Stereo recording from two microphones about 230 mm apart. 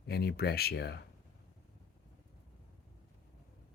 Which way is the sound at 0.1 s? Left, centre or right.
Left.